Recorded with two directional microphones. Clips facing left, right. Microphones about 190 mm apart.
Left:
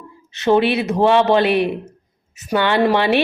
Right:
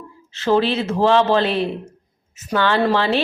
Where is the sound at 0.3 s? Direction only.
20° left (ahead or behind).